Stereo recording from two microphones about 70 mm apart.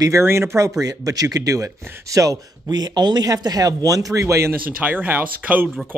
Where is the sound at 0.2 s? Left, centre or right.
Right.